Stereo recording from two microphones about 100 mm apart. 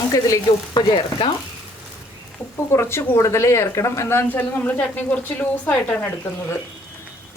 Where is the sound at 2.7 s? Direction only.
25° left (ahead or behind).